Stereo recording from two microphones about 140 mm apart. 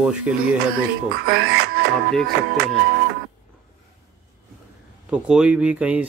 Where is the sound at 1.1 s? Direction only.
90° right.